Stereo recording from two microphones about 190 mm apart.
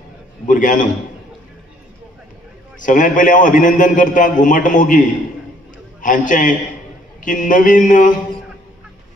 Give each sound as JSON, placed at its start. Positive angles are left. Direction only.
{"t": 0.5, "sound": "a man's voice", "side_deg": 45}
{"t": 2.8, "sound": "a man's voice", "side_deg": 45}